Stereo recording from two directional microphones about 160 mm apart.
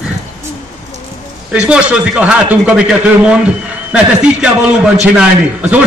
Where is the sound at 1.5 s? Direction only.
5° right (ahead or behind).